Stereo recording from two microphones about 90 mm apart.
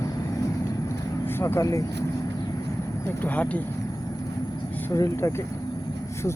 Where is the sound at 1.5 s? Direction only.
35° left (ahead or behind).